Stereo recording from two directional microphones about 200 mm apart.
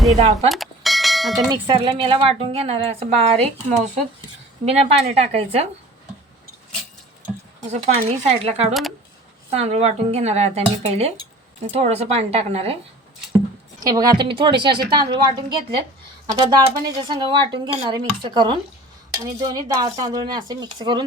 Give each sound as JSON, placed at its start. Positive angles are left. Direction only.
{"t": 0.4, "sound": "bell", "side_deg": 0}
{"t": 1.6, "sound": "speech", "side_deg": -25}
{"t": 7.7, "sound": "speech", "side_deg": -35}
{"t": 13.7, "sound": "a woman's voice", "side_deg": -20}